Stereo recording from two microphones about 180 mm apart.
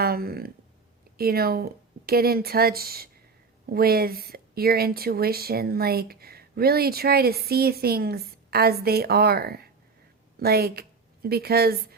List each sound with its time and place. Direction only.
0.0 s a woman's voice: 55° right (ahead or behind)